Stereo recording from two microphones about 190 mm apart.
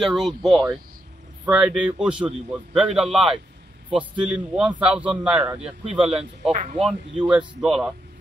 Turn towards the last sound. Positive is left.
turn(degrees=0)  # may be behind; listen again after turning